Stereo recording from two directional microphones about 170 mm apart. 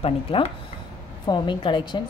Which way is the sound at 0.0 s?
35° left (ahead or behind).